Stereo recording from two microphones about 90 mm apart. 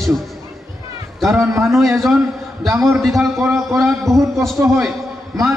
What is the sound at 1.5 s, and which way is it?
Speech, 30° right (ahead or behind).